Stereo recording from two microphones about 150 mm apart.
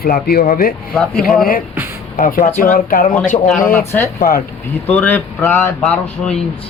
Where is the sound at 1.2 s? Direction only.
Centre (ahead or behind).